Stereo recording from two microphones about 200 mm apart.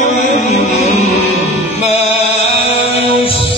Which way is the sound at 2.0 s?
55° right (ahead or behind).